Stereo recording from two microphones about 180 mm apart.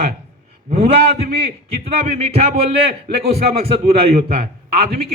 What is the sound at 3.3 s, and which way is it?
A man's voice, 35° right (ahead or behind).